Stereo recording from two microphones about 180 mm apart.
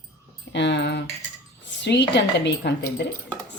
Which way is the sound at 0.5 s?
75° left (ahead or behind).